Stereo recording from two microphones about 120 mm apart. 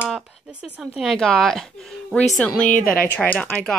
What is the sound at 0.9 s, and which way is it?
A woman's voice, centre (ahead or behind).